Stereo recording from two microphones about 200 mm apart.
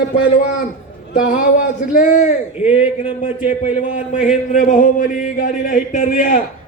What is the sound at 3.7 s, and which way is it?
A man's voice, 40° left (ahead or behind).